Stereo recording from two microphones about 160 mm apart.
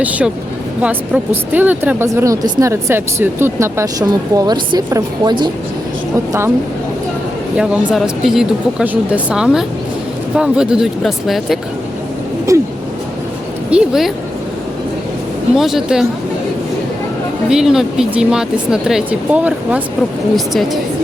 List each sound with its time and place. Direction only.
0.0 s speech: 10° right (ahead or behind)
7.5 s speech: 5° right (ahead or behind)
12.5 s a sound: 20° right (ahead or behind)
13.7 s speech: 5° right (ahead or behind)
15.5 s speech: centre (ahead or behind)
17.5 s speech: 5° right (ahead or behind)